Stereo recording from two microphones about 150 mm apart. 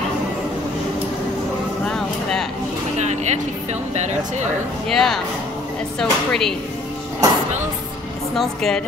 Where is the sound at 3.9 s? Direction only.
50° right (ahead or behind).